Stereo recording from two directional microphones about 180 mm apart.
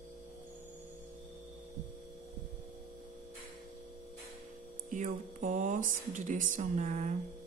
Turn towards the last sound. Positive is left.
turn(degrees=-40)  # may be behind; listen again after turning